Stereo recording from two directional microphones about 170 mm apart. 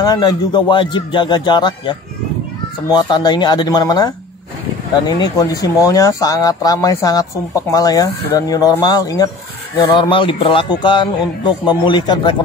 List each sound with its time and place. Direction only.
0.0 s speech: 25° left (ahead or behind)
5.2 s speech: 20° left (ahead or behind)